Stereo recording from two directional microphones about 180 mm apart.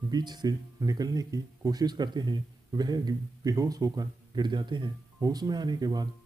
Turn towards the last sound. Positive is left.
turn(degrees=-20)  # may be behind; listen again after turning